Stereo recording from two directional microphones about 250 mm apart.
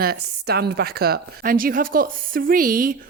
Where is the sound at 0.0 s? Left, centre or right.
Right.